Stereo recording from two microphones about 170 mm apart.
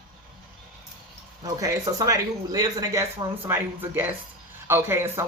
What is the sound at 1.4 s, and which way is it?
Speech, 20° right (ahead or behind).